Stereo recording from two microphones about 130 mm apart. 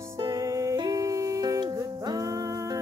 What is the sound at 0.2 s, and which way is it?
Music, 25° right (ahead or behind).